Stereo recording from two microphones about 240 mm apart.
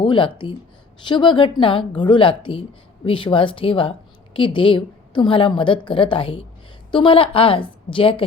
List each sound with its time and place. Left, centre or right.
0.0 s a woman's voice: centre